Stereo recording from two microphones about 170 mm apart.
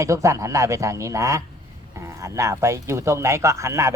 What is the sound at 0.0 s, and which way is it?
Speech, 20° right (ahead or behind).